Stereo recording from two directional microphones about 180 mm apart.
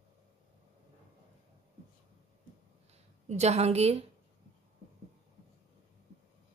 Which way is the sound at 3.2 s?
40° right (ahead or behind).